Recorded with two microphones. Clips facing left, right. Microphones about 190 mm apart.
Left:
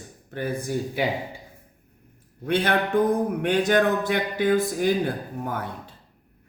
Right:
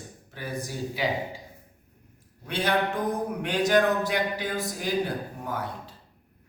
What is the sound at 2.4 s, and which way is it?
A man's voice, 60° left (ahead or behind).